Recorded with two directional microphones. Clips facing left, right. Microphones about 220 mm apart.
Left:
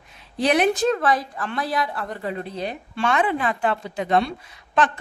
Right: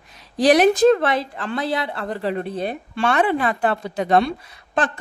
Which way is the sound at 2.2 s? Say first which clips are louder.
Right 5 dB; 65° right (ahead or behind).